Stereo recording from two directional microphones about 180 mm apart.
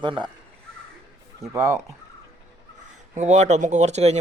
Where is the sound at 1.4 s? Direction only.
15° right (ahead or behind).